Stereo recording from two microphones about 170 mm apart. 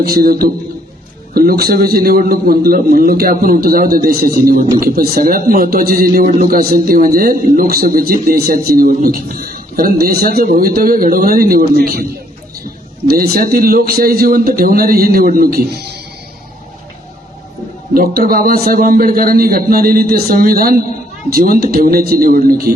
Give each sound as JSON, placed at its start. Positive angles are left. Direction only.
{"t": 0.0, "sound": "a man's voice", "side_deg": -60}
{"t": 13.1, "sound": "a man's voice", "side_deg": -65}
{"t": 17.9, "sound": "a man's voice", "side_deg": -60}